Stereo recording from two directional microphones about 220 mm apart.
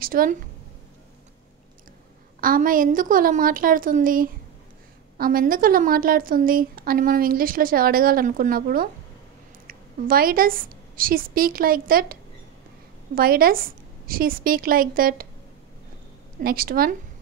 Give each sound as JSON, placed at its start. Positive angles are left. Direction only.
{"t": 0.0, "sound": "a woman's voice", "side_deg": -40}
{"t": 2.4, "sound": "a woman's voice", "side_deg": -40}
{"t": 16.4, "sound": "a woman's voice", "side_deg": -40}